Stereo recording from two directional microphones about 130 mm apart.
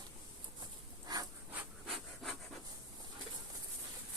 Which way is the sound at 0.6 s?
30° right (ahead or behind).